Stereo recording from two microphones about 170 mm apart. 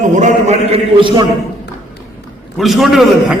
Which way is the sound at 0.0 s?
45° right (ahead or behind).